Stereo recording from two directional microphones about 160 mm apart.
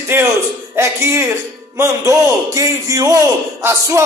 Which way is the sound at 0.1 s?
15° right (ahead or behind).